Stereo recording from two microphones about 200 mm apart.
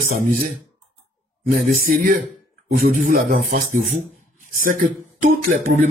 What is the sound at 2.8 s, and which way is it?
A man's voice, 45° right (ahead or behind).